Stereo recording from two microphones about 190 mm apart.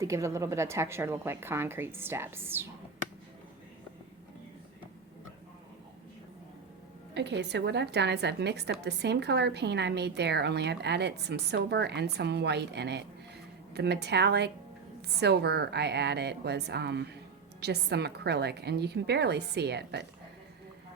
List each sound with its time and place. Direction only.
0.0 s a woman's voice: 15° right (ahead or behind)
7.1 s a woman's voice: 65° right (ahead or behind)